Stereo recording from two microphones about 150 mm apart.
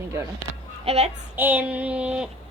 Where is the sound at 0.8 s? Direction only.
45° right (ahead or behind).